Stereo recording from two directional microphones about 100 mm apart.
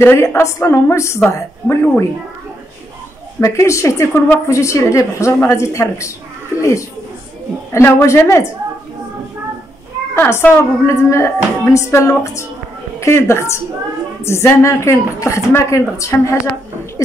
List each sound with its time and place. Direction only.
0.0 s a woman's voice: 20° left (ahead or behind)
3.3 s a woman's voice: 30° left (ahead or behind)
7.7 s a woman's voice: 30° left (ahead or behind)
10.1 s a woman's voice: 20° left (ahead or behind)